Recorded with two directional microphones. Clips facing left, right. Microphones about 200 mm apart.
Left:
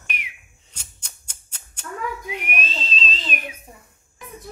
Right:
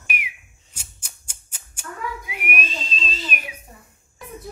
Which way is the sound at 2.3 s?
10° right (ahead or behind).